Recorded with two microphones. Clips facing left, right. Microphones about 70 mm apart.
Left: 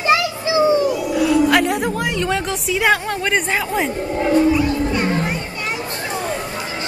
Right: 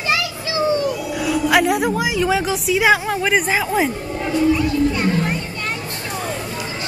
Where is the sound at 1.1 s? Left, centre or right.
Centre.